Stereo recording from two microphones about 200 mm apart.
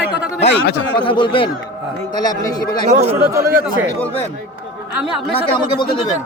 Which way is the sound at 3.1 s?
15° right (ahead or behind).